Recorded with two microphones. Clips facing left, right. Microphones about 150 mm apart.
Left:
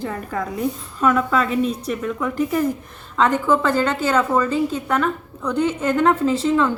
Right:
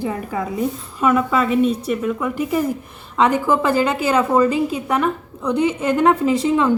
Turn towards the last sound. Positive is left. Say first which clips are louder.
# right 1 dB
turn(degrees=-15)  # may be behind; listen again after turning